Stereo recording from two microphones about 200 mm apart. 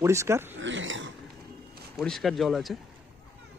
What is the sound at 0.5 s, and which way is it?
Speech, 70° right (ahead or behind).